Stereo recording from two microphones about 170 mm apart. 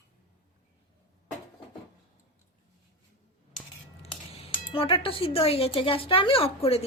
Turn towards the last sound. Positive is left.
turn(degrees=35)  # may be behind; listen again after turning